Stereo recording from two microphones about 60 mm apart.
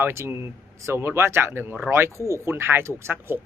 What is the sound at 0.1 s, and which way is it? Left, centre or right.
Speech, right.